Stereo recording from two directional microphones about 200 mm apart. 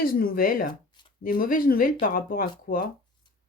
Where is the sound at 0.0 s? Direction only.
45° left (ahead or behind).